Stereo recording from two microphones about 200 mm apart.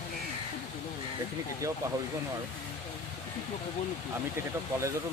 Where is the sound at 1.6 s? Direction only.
15° right (ahead or behind).